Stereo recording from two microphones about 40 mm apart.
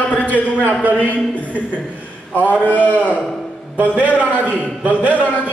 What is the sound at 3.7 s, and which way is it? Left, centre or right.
Speech, right.